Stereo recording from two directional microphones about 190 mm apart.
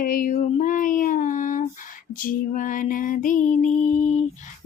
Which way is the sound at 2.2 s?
45° left (ahead or behind).